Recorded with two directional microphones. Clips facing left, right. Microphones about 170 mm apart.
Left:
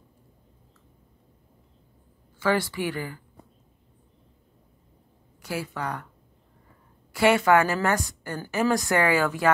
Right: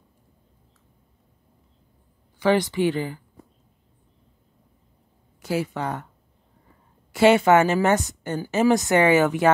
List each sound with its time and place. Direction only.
2.3 s a woman's voice: 20° right (ahead or behind)
5.4 s a woman's voice: 25° right (ahead or behind)
7.1 s a woman's voice: 25° right (ahead or behind)